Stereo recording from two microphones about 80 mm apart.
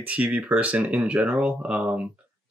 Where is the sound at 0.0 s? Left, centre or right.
Centre.